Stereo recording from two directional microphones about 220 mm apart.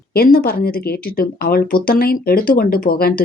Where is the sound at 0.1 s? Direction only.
45° left (ahead or behind).